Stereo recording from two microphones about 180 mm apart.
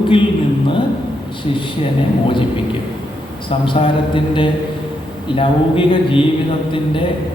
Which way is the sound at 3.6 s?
30° left (ahead or behind).